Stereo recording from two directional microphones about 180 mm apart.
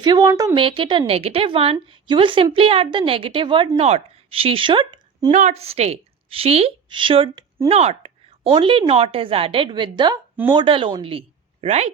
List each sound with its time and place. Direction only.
0.0 s a woman's voice: 25° right (ahead or behind)
5.3 s a woman's voice: 40° right (ahead or behind)